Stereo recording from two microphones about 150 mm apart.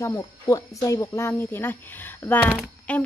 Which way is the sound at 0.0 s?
25° left (ahead or behind).